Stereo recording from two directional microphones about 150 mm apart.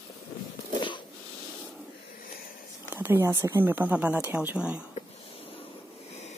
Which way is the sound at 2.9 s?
15° right (ahead or behind).